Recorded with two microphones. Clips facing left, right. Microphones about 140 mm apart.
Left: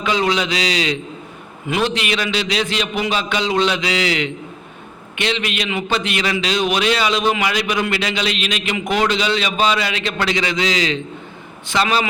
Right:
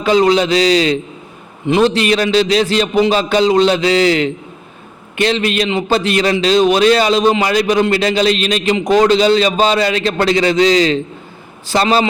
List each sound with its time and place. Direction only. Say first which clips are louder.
0.0 s a man's voice: right 7 dB; 40° right (ahead or behind)